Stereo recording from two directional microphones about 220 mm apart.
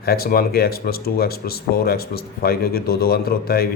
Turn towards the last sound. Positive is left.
turn(degrees=45)  # may be behind; listen again after turning